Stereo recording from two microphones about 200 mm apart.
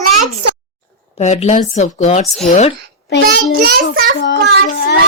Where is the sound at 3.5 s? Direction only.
50° right (ahead or behind).